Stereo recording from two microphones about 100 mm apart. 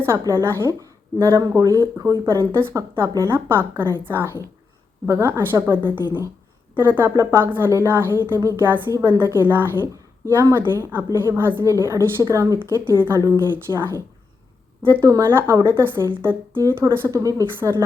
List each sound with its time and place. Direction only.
0.0 s a woman's voice: 25° right (ahead or behind)
13.5 s a woman's voice: 25° right (ahead or behind)